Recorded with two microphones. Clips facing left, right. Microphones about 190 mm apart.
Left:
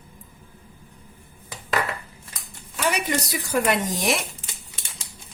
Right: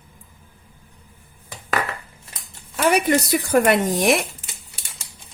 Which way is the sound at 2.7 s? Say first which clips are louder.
Right 7 dB; 55° right (ahead or behind).